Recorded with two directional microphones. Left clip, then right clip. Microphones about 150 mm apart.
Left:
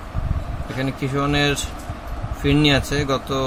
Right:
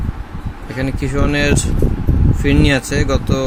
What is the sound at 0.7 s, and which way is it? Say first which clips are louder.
Speech: right 3 dB; 20° right (ahead or behind).